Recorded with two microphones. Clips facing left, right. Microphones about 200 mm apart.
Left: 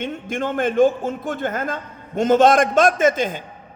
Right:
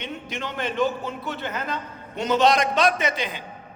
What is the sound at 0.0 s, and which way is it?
A man's voice, 50° left (ahead or behind).